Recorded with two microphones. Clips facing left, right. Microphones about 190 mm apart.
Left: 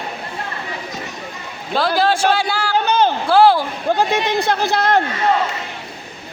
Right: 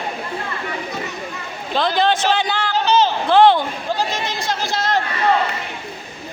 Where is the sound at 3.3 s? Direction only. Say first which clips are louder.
Even; 5° left (ahead or behind).